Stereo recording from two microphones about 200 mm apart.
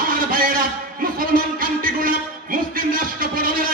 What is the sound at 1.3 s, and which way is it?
Music, 45° right (ahead or behind).